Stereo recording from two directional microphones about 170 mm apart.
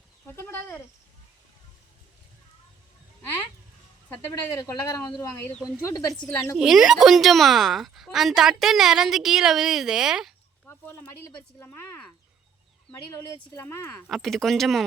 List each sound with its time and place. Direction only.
0.3 s speech: 15° left (ahead or behind)
4.5 s a man's voice: 20° left (ahead or behind)
6.6 s a woman's voice: 5° right (ahead or behind)
10.7 s speech: 15° left (ahead or behind)
13.6 s speech: 15° left (ahead or behind)
14.1 s a woman's voice: centre (ahead or behind)